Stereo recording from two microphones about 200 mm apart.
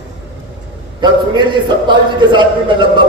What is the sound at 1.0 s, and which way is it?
A man's voice, 20° right (ahead or behind).